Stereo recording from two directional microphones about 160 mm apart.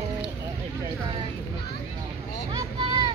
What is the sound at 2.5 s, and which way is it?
Vehicle, 30° right (ahead or behind).